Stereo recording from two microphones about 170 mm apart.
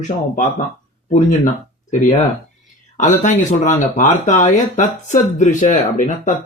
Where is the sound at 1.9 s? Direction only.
45° left (ahead or behind).